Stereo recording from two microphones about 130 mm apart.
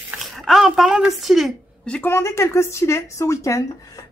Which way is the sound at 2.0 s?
20° left (ahead or behind).